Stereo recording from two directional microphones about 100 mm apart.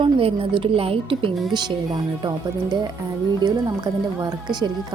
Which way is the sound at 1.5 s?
45° right (ahead or behind).